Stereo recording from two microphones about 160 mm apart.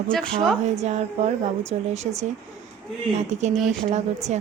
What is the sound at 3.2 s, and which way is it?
Speech, 45° right (ahead or behind).